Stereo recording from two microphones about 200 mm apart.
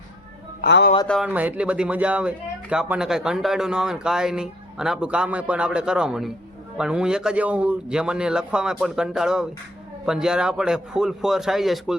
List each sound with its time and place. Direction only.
0.6 s speech: 55° left (ahead or behind)
1.0 s speech: 5° left (ahead or behind)
1.3 s speech: 10° right (ahead or behind)